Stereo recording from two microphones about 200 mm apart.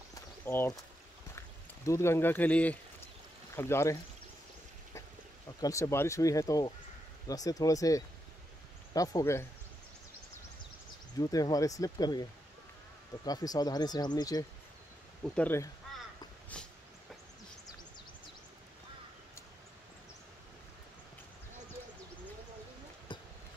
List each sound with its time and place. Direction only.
0.1 s a sound: 10° left (ahead or behind)
1.9 s speech: 15° left (ahead or behind)
5.6 s speech: 15° left (ahead or behind)
11.1 s speech: 20° left (ahead or behind)
15.2 s speech: 5° left (ahead or behind)
16.5 s dog: 5° left (ahead or behind)
23.1 s a sound: 25° left (ahead or behind)